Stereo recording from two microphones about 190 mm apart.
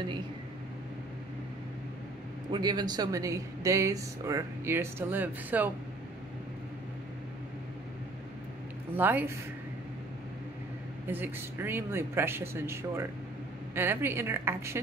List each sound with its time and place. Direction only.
2.5 s speech: 20° right (ahead or behind)
8.9 s speech: 10° right (ahead or behind)
11.1 s speech: 10° right (ahead or behind)